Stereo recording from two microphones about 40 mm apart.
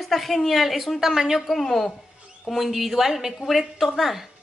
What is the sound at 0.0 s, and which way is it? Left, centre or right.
A woman's voice, centre.